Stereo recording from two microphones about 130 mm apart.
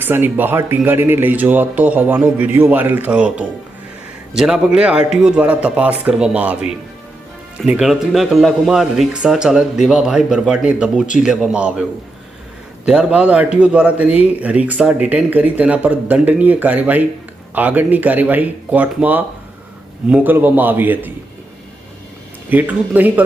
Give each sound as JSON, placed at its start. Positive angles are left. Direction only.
{"t": 0.0, "sound": "a man's voice", "side_deg": -15}
{"t": 22.4, "sound": "a man's voice", "side_deg": -15}